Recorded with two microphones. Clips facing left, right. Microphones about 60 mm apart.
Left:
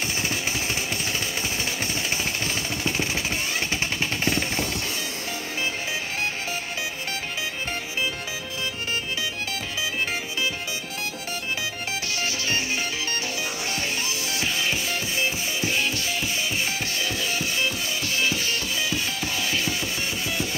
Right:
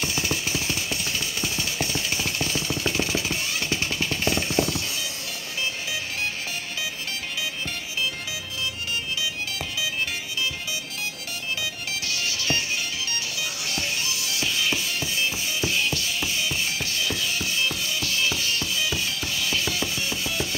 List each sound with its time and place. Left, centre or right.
0.0 s a sound: left
1.4 s vehicle: left
12.1 s music: left
13.7 s music: left